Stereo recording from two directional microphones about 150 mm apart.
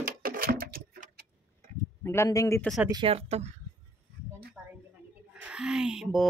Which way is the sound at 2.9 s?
40° right (ahead or behind).